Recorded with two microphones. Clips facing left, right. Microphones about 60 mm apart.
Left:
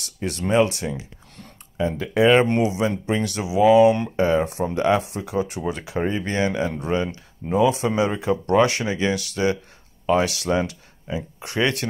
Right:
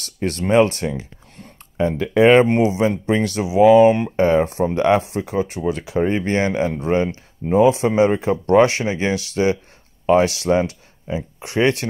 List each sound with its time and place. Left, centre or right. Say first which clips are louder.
0.2 s speech: right 4 dB; right
2.3 s speech: right 4 dB; centre
2.6 s speech: right 4 dB; right
5.7 s speech: right 5 dB; left
6.1 s speech: right 4 dB; right